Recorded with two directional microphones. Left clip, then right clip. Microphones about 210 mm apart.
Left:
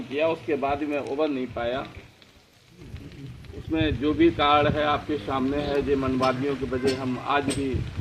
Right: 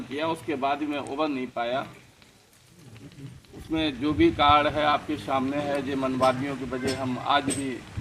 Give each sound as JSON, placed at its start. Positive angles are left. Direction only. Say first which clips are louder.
{"t": 0.2, "sound": "speech", "louder": "left 4 dB", "side_deg": -35}
{"t": 3.7, "sound": "speech", "louder": "left 2 dB", "side_deg": -65}